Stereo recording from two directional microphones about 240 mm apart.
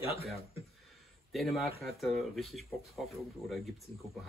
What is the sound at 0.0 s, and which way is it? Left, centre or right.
Speech, left.